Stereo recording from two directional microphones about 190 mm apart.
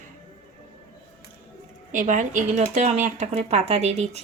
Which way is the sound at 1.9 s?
40° right (ahead or behind).